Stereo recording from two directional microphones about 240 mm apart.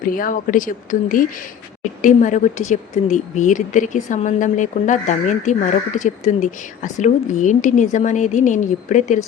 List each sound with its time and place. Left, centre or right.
0.0 s speech: left